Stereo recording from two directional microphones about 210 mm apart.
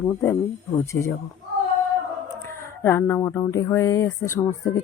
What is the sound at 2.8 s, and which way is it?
A woman's voice, 10° left (ahead or behind).